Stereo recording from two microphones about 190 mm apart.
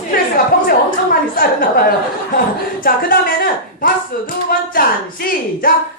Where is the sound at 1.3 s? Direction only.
50° left (ahead or behind).